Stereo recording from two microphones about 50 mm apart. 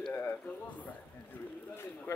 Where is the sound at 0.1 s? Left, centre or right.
Left.